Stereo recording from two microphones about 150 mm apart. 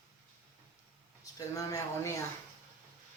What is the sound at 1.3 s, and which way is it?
Speech, 25° left (ahead or behind).